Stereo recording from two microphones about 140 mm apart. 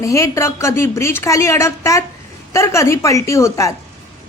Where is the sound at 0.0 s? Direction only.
20° left (ahead or behind).